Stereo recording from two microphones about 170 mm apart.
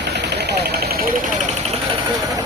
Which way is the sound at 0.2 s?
80° right.